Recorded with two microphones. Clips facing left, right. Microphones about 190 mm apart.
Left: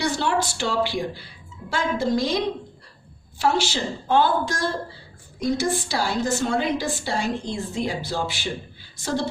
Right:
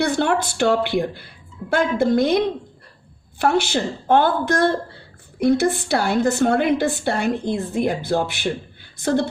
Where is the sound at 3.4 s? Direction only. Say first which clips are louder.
Right 4 dB; 55° right (ahead or behind).